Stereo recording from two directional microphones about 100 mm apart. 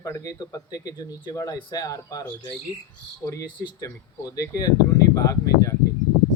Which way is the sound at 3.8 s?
35° left (ahead or behind).